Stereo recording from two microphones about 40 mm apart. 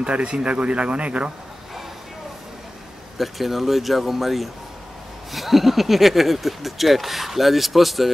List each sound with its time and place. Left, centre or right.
0.0 s speech: right
3.2 s speech: centre